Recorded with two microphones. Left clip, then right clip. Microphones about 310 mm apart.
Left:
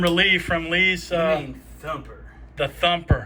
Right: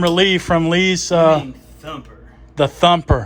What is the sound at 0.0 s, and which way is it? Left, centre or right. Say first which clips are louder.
Speech: right 4 dB; centre.